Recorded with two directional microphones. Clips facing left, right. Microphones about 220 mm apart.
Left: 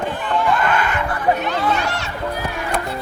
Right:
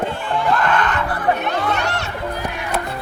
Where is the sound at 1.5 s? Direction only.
65° right (ahead or behind).